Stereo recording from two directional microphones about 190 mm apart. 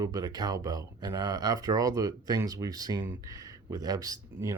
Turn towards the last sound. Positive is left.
turn(degrees=-20)  # may be behind; listen again after turning